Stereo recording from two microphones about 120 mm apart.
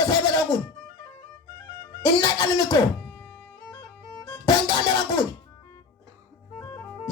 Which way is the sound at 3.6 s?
40° left (ahead or behind).